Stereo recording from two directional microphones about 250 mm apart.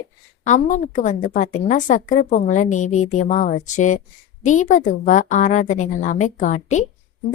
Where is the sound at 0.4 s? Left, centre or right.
Left.